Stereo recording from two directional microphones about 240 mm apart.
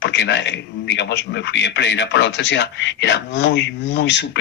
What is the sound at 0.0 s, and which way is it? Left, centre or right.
A man's voice, left.